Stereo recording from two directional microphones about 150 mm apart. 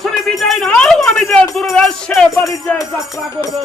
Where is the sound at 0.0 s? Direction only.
Centre (ahead or behind).